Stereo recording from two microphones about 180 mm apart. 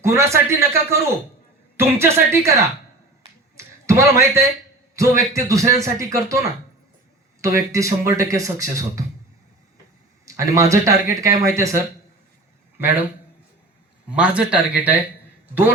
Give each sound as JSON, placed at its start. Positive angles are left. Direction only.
{"t": 0.0, "sound": "a man's voice", "side_deg": -15}
{"t": 3.6, "sound": "a sound", "side_deg": -15}
{"t": 4.9, "sound": "a man's voice", "side_deg": -15}
{"t": 7.4, "sound": "a man's voice", "side_deg": -15}
{"t": 10.2, "sound": "a man's voice", "side_deg": -15}
{"t": 14.1, "sound": "speech", "side_deg": -5}